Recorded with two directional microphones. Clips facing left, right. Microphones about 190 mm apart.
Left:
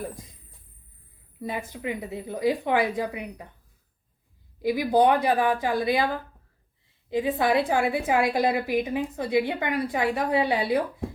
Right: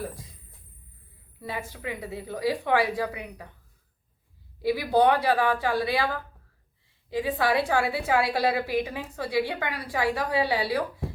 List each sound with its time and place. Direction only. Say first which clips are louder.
1.4 s a woman's voice: left 3 dB; 20° left (ahead or behind)
4.6 s a woman's voice: left 1 dB; 15° left (ahead or behind)
7.1 s a woman's voice: left 2 dB; 20° left (ahead or behind)